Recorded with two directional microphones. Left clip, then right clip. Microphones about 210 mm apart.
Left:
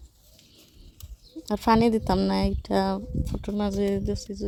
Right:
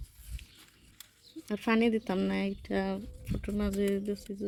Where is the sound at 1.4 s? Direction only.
15° left (ahead or behind).